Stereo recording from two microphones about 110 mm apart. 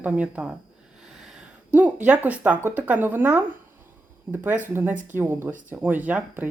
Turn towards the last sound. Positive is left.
turn(degrees=-15)  # may be behind; listen again after turning